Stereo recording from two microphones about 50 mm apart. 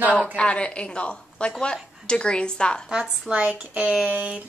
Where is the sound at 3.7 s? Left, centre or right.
Right.